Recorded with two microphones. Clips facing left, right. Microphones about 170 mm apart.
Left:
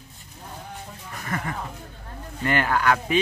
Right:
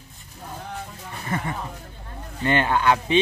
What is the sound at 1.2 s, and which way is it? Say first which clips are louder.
Speech: right 2 dB; 25° right (ahead or behind).